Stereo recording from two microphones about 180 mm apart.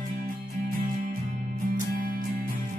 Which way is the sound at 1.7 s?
55° right (ahead or behind).